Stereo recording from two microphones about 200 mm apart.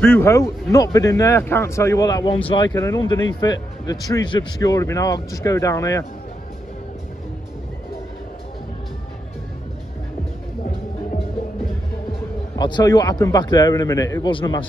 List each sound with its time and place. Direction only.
0.0 s speech: 10° left (ahead or behind)
12.5 s a man's voice: 20° left (ahead or behind)